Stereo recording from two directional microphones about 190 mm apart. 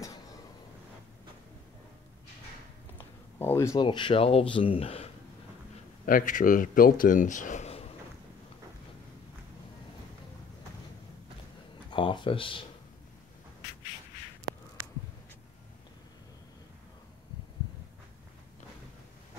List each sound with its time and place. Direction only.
3.3 s speech: 15° left (ahead or behind); by 5.1 s 30° left (ahead or behind)
6.0 s speech: 45° left (ahead or behind)
11.9 s speech: 25° left (ahead or behind)